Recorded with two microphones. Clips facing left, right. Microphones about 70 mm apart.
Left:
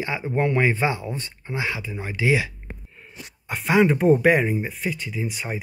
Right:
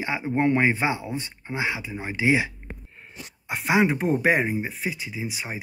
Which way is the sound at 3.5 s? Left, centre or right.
Centre.